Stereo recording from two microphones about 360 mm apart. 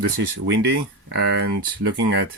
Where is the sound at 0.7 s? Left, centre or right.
Right.